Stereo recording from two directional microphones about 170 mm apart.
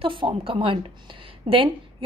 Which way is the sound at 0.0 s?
30° right (ahead or behind).